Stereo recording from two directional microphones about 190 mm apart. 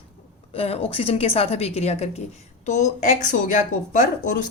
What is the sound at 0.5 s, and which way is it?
A woman's voice, 30° left (ahead or behind).